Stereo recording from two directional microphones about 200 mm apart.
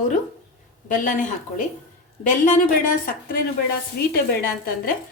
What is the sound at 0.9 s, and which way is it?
A woman's voice, 40° left (ahead or behind).